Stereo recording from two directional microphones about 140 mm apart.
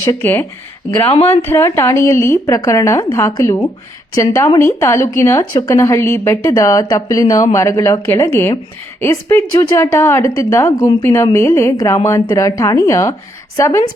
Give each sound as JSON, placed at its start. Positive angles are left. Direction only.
{"t": 0.0, "sound": "speech", "side_deg": 20}
{"t": 1.1, "sound": "a woman's voice", "side_deg": 45}
{"t": 1.4, "sound": "a woman's voice", "side_deg": 15}